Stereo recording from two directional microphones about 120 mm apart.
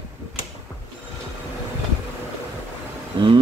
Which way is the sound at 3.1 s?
45° right (ahead or behind).